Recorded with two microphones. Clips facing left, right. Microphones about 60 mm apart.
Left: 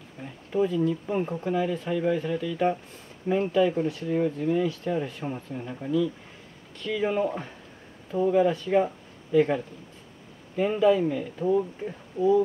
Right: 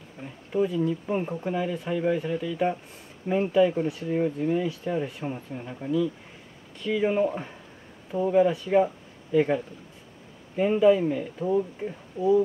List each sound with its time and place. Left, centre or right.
0.5 s speech: centre